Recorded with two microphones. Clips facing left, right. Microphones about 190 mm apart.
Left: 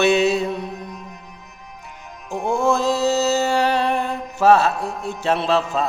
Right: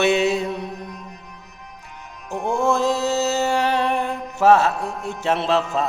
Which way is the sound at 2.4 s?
15° right (ahead or behind).